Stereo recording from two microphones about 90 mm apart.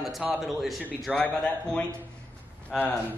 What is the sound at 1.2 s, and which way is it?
Speech, 15° left (ahead or behind).